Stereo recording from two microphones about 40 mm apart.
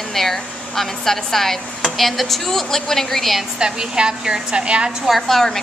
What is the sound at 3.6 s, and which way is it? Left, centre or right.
A woman's voice, right.